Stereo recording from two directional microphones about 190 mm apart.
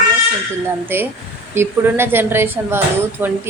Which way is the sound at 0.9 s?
10° right (ahead or behind).